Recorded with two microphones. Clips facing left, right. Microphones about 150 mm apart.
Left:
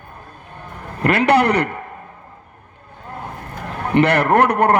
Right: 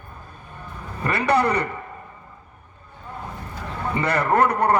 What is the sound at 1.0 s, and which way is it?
Speech, 75° left (ahead or behind).